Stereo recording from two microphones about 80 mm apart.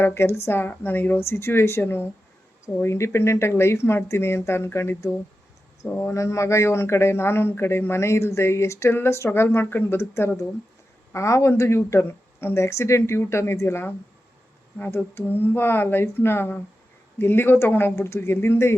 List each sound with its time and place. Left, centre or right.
0.0 s speech: left